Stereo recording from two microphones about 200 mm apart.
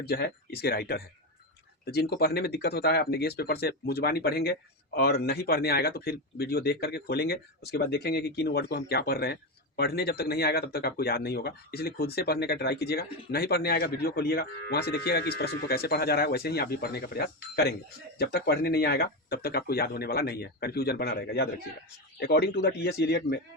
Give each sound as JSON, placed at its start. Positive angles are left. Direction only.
{"t": 0.0, "sound": "speech", "side_deg": 55}